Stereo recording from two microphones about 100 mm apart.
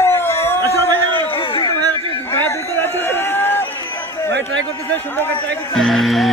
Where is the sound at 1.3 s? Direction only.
55° left (ahead or behind).